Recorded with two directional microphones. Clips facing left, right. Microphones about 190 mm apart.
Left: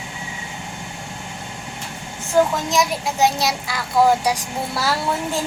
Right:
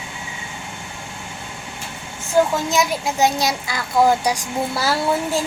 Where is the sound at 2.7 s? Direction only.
Centre (ahead or behind).